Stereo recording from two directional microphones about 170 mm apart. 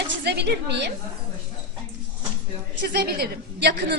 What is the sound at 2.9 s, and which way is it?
A woman's voice, 70° right (ahead or behind).